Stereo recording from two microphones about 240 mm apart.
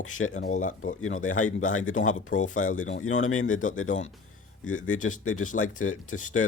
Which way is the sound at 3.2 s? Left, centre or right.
Left.